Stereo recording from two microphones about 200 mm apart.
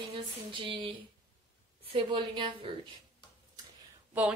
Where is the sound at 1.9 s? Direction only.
25° right (ahead or behind).